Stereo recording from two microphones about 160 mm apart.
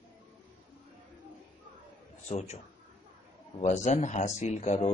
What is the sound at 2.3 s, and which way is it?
Speech, 45° left (ahead or behind).